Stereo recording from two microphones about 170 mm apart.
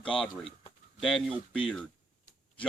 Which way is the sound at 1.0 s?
Centre (ahead or behind).